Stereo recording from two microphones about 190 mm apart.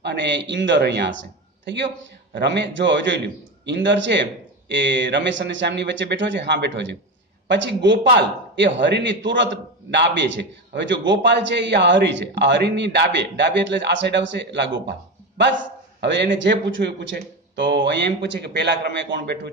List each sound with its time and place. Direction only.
0.0 s a man's voice: 65° right (ahead or behind)
14.9 s a sound: 65° right (ahead or behind)
16.3 s a man's voice: 75° right (ahead or behind)